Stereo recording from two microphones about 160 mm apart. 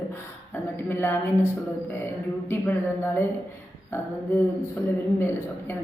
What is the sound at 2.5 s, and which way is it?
Speech, 15° left (ahead or behind).